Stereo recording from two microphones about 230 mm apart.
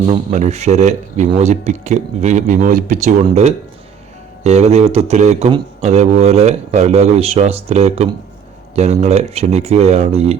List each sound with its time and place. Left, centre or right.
0.1 s speech: right